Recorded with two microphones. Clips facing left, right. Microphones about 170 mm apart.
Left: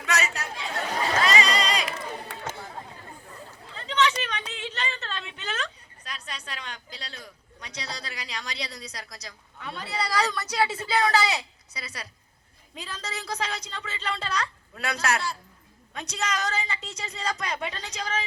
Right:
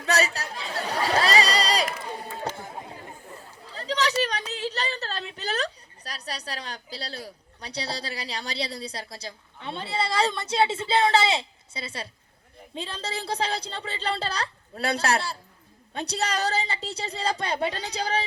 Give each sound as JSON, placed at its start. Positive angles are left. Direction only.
{"t": 0.0, "sound": "chatter", "side_deg": -35}
{"t": 3.7, "sound": "a woman's voice", "side_deg": -35}